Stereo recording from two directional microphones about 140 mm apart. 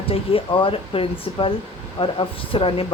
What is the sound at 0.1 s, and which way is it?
A man's voice, 40° left (ahead or behind).